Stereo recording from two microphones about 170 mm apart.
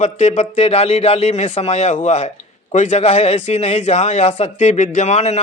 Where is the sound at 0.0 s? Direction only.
40° left (ahead or behind).